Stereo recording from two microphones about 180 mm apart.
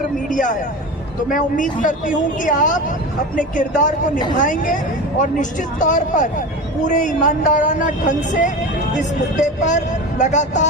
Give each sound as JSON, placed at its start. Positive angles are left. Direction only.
{"t": 0.3, "sound": "speech", "side_deg": 45}